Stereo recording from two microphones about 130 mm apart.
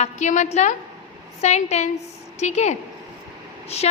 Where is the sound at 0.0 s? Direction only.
65° left (ahead or behind).